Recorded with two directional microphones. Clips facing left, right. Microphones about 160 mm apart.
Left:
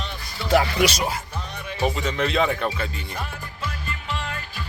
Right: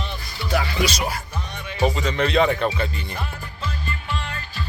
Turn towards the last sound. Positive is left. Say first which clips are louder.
# even
turn(degrees=10)  # may be behind; listen again after turning